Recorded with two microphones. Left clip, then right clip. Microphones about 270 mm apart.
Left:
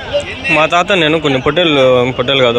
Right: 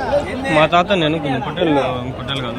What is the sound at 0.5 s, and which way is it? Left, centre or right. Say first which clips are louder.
Speech: left 3 dB; centre.